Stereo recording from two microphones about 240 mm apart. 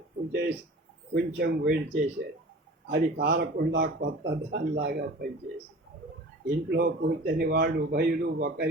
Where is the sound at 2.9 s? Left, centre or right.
Right.